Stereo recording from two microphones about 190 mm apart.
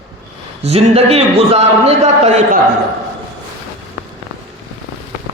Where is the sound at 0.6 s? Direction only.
35° right (ahead or behind).